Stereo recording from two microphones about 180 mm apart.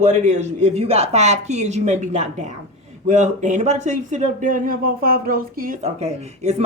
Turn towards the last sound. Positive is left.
turn(degrees=-35)  # may be behind; listen again after turning